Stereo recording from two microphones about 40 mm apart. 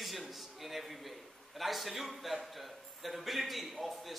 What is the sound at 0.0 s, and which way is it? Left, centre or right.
A man's voice, centre.